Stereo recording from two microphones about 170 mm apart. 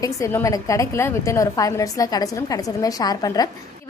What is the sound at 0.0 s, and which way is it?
A woman's voice, 20° left (ahead or behind).